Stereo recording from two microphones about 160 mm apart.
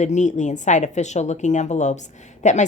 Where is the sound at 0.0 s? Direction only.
50° left (ahead or behind).